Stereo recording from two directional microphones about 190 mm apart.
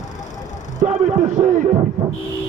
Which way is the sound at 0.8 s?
35° right (ahead or behind).